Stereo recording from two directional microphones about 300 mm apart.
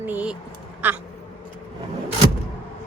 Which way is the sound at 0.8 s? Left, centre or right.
Centre.